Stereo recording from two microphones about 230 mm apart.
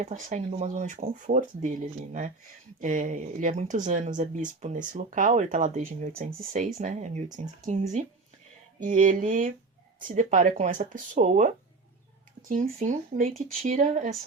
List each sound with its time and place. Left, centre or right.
0.0 s speech: right
2.8 s speech: right
8.8 s speech: right